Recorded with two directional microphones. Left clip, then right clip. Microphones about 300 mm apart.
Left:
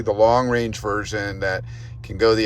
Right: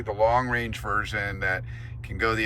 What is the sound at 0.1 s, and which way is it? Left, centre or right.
Speech, centre.